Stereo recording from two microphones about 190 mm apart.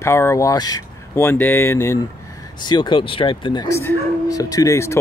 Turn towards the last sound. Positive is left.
turn(degrees=15)  # may be behind; listen again after turning